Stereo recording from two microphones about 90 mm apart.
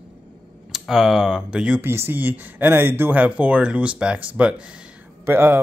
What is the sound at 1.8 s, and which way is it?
Speech, 25° right (ahead or behind).